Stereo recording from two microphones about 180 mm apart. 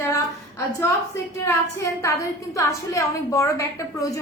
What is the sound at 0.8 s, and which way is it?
A woman's voice, 15° left (ahead or behind).